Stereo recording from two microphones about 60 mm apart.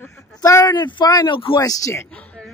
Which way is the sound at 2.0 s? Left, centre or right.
Centre.